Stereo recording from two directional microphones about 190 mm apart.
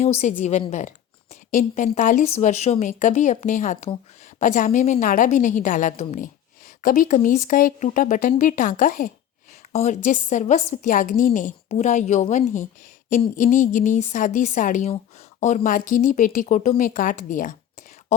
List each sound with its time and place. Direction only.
0.0 s a woman's voice: 35° left (ahead or behind)